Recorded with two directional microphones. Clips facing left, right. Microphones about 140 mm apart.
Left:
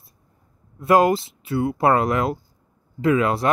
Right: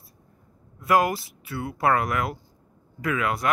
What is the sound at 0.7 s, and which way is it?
Speech, 25° left (ahead or behind).